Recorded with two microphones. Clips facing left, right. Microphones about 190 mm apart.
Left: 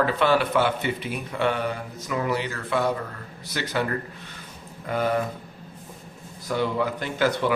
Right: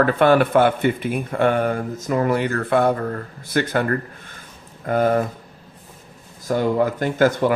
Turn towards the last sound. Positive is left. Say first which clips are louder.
# right 6 dB
turn(degrees=-45)  # may be behind; listen again after turning